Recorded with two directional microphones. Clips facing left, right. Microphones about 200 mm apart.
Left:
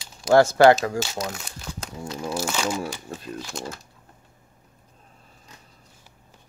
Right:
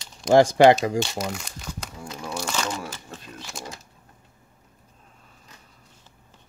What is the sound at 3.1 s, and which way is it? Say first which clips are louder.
Typewriter: left 5 dB; 30° left (ahead or behind).